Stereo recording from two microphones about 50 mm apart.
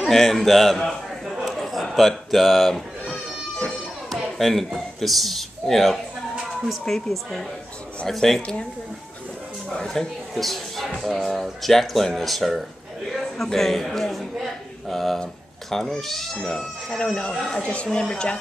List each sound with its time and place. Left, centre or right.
0.0 s a sound: centre
3.6 s children playing: centre
4.7 s a man's voice: centre
9.8 s a man's voice: centre
17.3 s a man's voice: centre
17.6 s speech: left